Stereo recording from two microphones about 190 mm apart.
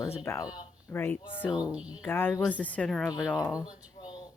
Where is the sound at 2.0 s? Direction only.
10° left (ahead or behind).